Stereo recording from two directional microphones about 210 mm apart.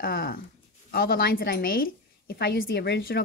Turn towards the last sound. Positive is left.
turn(degrees=50)  # may be behind; listen again after turning